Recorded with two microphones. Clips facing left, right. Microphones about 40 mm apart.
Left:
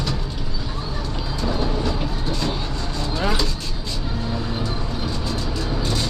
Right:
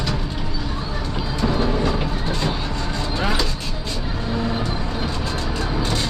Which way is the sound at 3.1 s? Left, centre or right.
Centre.